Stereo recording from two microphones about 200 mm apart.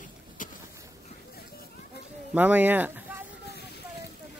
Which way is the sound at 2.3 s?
5° right (ahead or behind).